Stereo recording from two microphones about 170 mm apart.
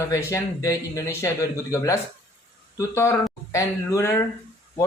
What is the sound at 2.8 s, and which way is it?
Speech, 15° left (ahead or behind).